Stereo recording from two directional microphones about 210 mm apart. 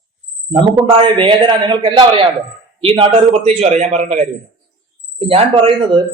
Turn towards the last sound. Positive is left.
turn(degrees=-25)  # may be behind; listen again after turning